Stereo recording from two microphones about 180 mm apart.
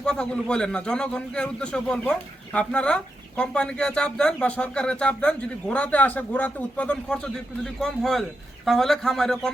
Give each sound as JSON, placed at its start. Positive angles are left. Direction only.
{"t": 0.0, "sound": "a man's voice", "side_deg": 5}